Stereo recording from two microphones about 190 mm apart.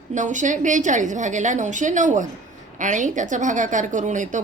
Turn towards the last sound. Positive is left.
turn(degrees=-40)  # may be behind; listen again after turning